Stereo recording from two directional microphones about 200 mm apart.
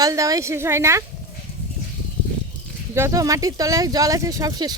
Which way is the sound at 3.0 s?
15° right (ahead or behind).